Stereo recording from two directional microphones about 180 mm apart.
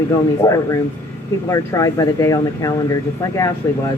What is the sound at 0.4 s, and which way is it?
Speech, 20° left (ahead or behind).